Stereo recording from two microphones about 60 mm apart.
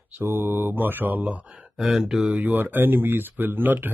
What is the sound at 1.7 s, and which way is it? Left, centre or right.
Speech, centre.